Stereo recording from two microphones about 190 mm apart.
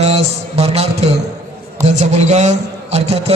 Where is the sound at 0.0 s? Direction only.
35° right (ahead or behind).